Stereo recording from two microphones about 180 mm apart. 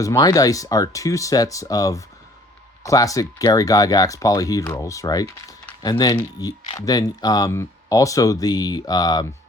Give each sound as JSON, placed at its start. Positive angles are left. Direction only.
{"t": 0.0, "sound": "speech", "side_deg": 20}